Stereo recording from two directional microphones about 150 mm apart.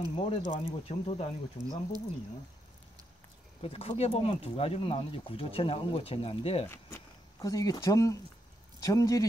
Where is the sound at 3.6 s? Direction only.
40° left (ahead or behind).